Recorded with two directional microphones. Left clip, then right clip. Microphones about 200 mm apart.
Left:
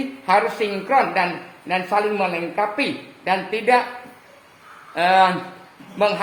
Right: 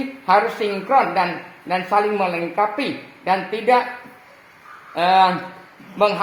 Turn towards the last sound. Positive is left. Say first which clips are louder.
# right 2 dB
turn(degrees=-25)  # may be behind; listen again after turning